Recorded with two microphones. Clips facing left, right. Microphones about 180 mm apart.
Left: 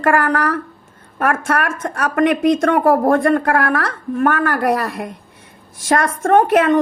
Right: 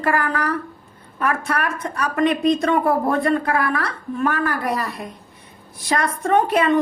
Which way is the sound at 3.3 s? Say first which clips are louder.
Left 4 dB; 70° left (ahead or behind).